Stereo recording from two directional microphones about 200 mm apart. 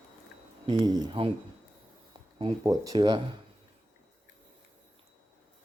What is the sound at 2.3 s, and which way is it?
Speech, 20° right (ahead or behind).